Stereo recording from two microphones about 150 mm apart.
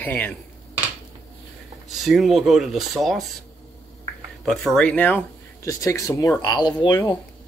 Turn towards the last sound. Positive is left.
turn(degrees=25)  # may be behind; listen again after turning